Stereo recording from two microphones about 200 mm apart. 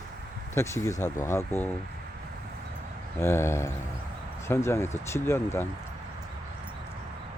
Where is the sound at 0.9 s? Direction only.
35° left (ahead or behind).